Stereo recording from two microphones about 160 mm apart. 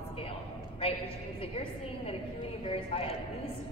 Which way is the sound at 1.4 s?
35° left (ahead or behind).